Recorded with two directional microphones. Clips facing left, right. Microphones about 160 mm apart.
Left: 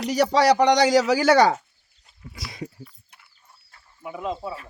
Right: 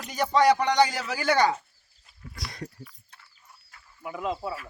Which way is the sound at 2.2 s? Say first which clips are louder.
Left 3 dB; centre (ahead or behind).